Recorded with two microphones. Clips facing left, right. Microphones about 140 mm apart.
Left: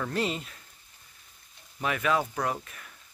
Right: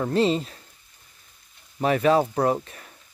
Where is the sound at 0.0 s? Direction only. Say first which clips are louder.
Right 9 dB; 30° right (ahead or behind).